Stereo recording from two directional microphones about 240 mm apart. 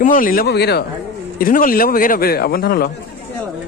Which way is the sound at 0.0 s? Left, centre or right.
Left.